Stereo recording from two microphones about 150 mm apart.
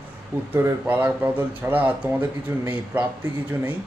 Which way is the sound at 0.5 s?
15° right (ahead or behind).